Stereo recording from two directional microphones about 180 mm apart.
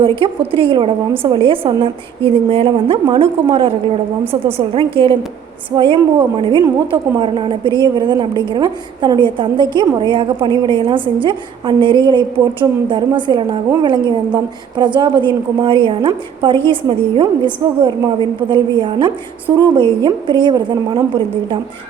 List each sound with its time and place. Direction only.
0.0 s a woman's voice: 30° right (ahead or behind)